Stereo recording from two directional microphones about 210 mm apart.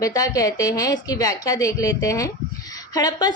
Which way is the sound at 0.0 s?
15° left (ahead or behind).